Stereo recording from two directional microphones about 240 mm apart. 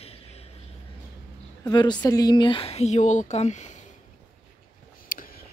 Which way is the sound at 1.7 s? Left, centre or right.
Centre.